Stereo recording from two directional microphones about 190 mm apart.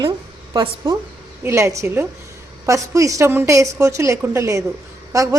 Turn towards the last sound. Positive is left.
turn(degrees=-15)  # may be behind; listen again after turning